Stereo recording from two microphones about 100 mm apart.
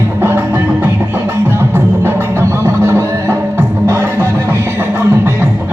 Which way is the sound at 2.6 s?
25° right (ahead or behind).